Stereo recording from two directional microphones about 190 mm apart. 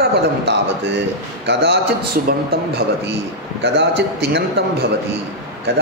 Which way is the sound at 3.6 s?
65° right (ahead or behind).